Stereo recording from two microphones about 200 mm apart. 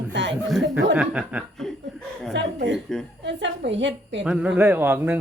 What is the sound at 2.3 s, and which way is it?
A woman's voice, 60° right (ahead or behind).